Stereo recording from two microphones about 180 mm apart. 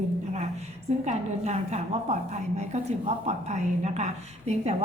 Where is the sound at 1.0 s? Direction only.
40° right (ahead or behind).